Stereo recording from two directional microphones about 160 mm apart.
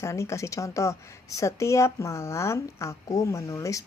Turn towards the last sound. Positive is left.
turn(degrees=20)  # may be behind; listen again after turning